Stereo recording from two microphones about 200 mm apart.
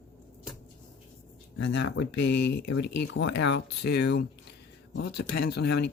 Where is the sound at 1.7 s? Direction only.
60° left (ahead or behind).